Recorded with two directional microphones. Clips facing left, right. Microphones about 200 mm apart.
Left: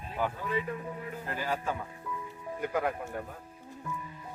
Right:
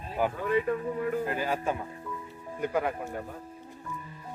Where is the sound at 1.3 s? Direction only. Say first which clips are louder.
Right 3 dB; 20° right (ahead or behind).